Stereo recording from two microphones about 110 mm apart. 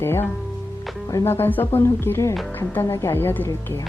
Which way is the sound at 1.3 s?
20° left (ahead or behind).